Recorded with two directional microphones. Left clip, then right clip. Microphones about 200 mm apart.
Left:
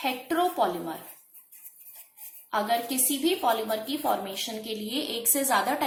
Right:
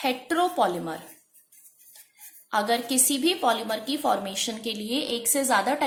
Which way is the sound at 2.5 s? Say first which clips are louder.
Right 2 dB; 40° right (ahead or behind).